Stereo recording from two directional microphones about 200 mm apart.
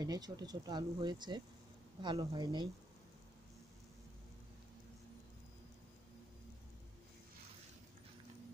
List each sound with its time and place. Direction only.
0.0 s speech: 20° right (ahead or behind)